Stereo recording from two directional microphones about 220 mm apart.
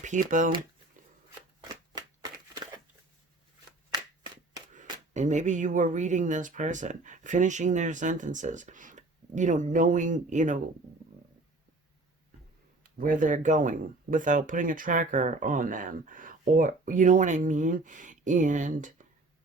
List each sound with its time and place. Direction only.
0.0 s speech: 35° right (ahead or behind)
1.9 s shuffling cards: 20° right (ahead or behind)
4.7 s speech: 35° right (ahead or behind)
13.0 s speech: 40° right (ahead or behind)